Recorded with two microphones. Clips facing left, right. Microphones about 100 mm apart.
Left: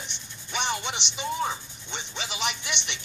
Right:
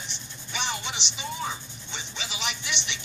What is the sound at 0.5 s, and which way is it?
Music, 50° left (ahead or behind).